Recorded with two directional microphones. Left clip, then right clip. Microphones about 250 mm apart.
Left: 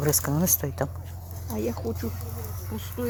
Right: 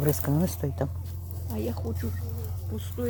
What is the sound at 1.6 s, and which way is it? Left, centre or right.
Speech, centre.